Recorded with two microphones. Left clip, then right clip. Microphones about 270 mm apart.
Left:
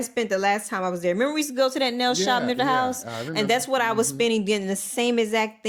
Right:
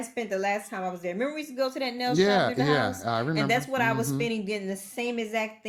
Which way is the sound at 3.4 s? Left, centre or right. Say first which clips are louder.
Left 8 dB; left.